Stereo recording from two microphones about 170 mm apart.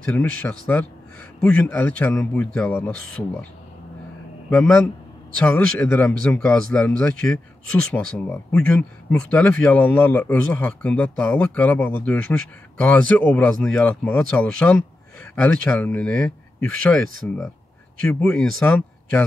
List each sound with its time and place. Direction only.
0.0 s speech: 10° left (ahead or behind)
4.5 s speech: 5° left (ahead or behind)